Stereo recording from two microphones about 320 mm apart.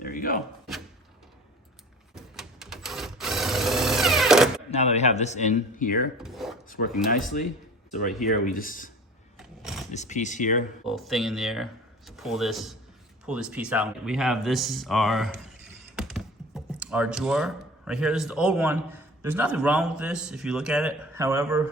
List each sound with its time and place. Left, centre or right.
0.0 s a sound: left
2.1 s sewing machine: centre
4.7 s speech: left
6.2 s a sound: centre
6.7 s speech: left
8.3 s speech: left
9.4 s vehicle: centre
9.9 s speech: left
10.8 s speech: centre